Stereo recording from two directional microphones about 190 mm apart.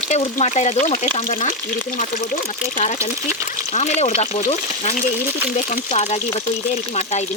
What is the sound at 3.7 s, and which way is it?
Speech, 40° left (ahead or behind).